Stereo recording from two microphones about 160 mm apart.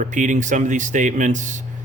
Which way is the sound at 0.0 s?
50° right (ahead or behind).